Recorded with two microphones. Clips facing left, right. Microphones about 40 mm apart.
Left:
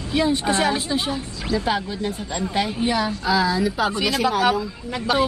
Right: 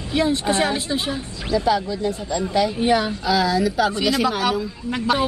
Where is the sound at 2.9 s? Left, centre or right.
Right.